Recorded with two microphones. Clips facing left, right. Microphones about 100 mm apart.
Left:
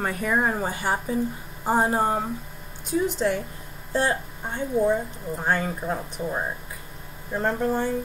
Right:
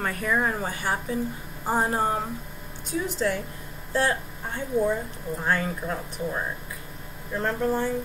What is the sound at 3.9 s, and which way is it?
A woman's voice, 20° left (ahead or behind).